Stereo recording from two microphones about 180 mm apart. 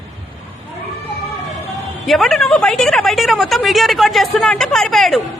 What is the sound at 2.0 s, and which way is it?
A woman's voice, centre (ahead or behind).